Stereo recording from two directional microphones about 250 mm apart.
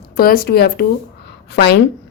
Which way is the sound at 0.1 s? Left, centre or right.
Left.